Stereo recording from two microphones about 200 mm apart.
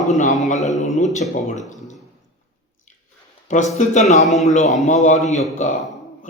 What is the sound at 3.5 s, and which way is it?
A man's voice, 35° left (ahead or behind).